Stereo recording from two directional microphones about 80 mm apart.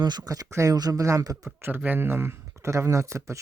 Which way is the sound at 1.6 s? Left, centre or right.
Right.